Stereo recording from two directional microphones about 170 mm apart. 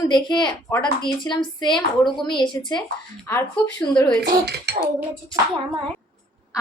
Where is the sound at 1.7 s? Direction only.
Centre (ahead or behind).